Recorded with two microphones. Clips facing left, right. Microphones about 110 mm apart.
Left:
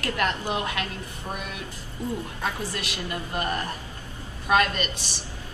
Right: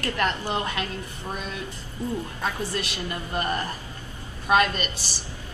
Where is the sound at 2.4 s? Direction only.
Centre (ahead or behind).